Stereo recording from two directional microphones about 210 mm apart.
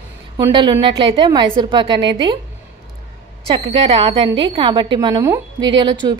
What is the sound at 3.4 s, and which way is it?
A woman's voice, 30° right (ahead or behind).